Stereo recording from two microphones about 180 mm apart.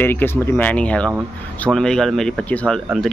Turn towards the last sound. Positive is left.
turn(degrees=5)  # may be behind; listen again after turning